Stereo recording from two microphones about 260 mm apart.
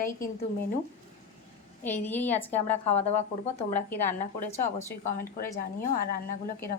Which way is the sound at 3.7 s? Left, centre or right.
Centre.